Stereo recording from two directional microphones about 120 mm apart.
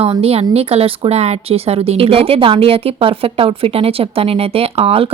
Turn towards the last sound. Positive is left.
turn(degrees=-55)  # may be behind; listen again after turning